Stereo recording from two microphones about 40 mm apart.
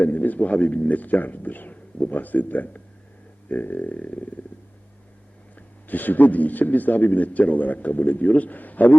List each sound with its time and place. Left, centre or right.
0.0 s a man's voice: left
3.5 s a sound: left
5.9 s a man's voice: left